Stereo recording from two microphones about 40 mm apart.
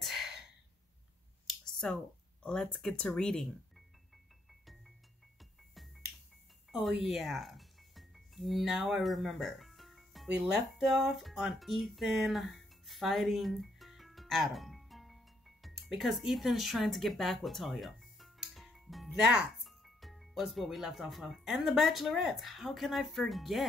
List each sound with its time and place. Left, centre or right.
0.0 s a sound: centre
1.6 s a sound: centre
2.5 s speech: left
4.5 s music: centre
8.7 s a woman's voice: centre
18.5 s music: centre
19.0 s speech: centre
19.6 s music: centre
20.8 s a woman's voice: centre